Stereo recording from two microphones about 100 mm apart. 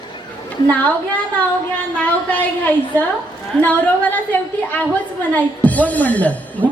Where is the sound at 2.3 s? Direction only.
15° left (ahead or behind).